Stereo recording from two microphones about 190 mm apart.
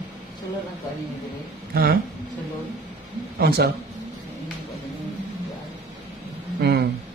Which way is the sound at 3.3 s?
55° right (ahead or behind).